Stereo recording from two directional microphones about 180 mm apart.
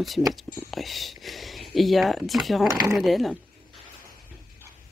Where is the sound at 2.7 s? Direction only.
20° right (ahead or behind).